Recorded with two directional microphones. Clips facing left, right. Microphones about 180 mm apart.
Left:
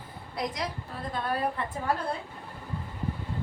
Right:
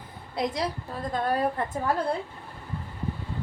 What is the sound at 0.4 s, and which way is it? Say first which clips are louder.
Speech: right 4 dB; 25° right (ahead or behind).